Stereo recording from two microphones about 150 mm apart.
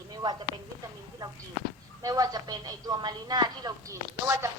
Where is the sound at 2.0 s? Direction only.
25° right (ahead or behind).